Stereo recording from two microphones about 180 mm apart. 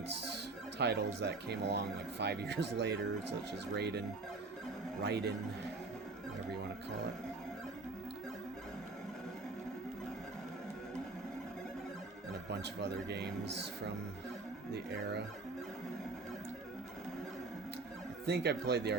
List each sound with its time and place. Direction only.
0.8 s speech: 70° right (ahead or behind)
5.0 s speech: 65° right (ahead or behind)
12.5 s speech: 65° right (ahead or behind)
18.3 s speech: 65° right (ahead or behind)